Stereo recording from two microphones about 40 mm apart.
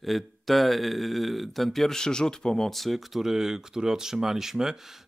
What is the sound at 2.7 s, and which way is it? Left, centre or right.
Speech, centre.